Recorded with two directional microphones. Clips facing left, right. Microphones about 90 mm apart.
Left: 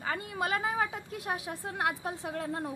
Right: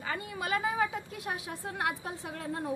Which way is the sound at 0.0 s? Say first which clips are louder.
Left 3 dB; 40° left (ahead or behind).